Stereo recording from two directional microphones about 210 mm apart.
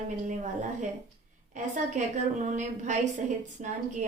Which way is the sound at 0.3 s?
35° right (ahead or behind).